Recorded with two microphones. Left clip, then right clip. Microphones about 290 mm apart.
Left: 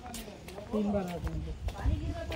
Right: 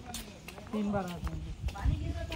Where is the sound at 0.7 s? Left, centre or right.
Centre.